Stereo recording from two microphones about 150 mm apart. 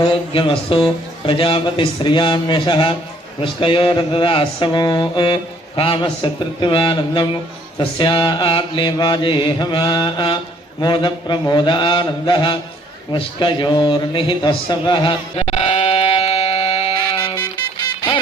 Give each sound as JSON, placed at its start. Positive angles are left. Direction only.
{"t": 0.0, "sound": "mantra", "side_deg": 35}
{"t": 15.4, "sound": "goat", "side_deg": 40}